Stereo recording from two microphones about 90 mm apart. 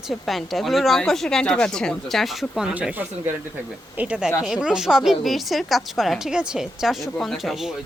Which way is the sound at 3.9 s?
15° right (ahead or behind).